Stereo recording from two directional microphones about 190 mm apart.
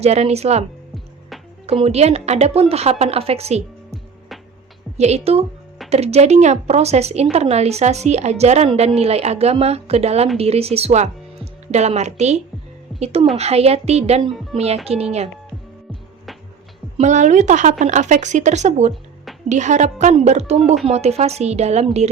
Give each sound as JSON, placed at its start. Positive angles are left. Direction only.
{"t": 0.0, "sound": "a woman's voice", "side_deg": -35}
{"t": 1.6, "sound": "a woman's voice", "side_deg": -30}
{"t": 4.9, "sound": "a woman's voice", "side_deg": -35}
{"t": 17.0, "sound": "a woman's voice", "side_deg": -40}